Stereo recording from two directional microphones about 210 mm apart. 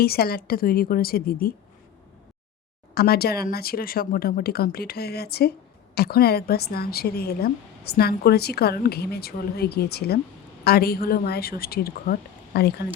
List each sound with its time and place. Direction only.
0.0 s a woman's voice: 45° left (ahead or behind)
2.9 s a woman's voice: 50° left (ahead or behind)